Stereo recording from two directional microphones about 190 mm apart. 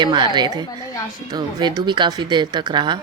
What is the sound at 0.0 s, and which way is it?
Speech, 25° right (ahead or behind).